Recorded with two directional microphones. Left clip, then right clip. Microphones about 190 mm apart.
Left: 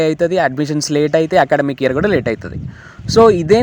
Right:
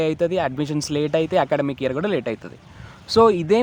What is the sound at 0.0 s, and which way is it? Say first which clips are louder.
Speech: left 7 dB; 20° left (ahead or behind).